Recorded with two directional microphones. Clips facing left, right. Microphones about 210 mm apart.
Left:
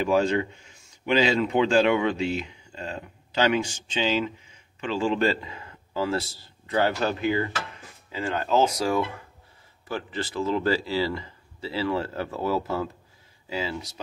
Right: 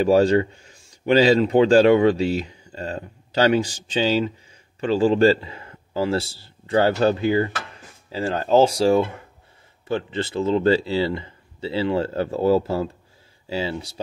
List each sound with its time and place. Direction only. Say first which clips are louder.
0.0 s a man's voice: right 6 dB; 35° right (ahead or behind)